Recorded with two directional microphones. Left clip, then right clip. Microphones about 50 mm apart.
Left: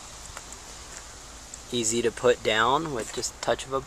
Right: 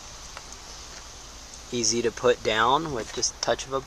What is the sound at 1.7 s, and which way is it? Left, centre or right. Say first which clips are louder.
Speech: right 1 dB; centre.